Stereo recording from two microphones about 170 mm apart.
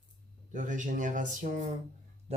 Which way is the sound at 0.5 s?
45° right (ahead or behind).